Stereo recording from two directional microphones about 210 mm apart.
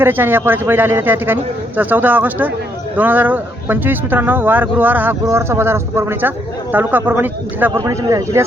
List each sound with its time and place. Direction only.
0.0 s speech: 10° right (ahead or behind)